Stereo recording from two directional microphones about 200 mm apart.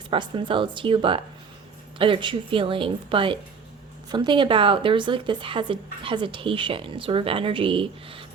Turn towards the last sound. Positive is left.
turn(degrees=-25)  # may be behind; listen again after turning